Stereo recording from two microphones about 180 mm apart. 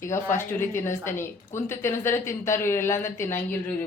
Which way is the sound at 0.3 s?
15° left (ahead or behind).